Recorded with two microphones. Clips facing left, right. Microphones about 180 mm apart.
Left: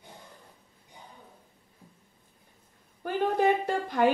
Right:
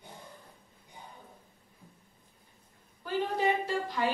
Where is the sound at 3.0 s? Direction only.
55° left (ahead or behind).